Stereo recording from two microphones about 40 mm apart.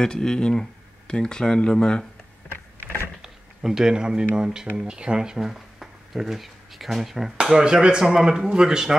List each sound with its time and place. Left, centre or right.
0.0 s speech: centre
3.2 s a sound: centre
4.4 s speech: centre
7.5 s speech: centre